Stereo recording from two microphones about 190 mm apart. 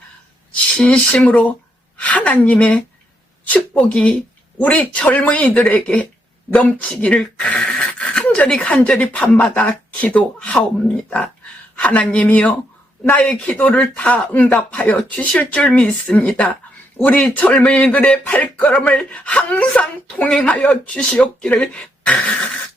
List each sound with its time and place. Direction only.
0.5 s a woman's voice: 5° left (ahead or behind)
11.8 s speech: 5° left (ahead or behind)